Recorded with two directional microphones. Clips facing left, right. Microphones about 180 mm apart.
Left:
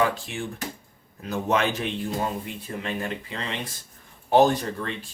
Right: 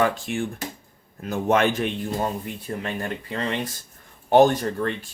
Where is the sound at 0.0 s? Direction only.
50° right (ahead or behind).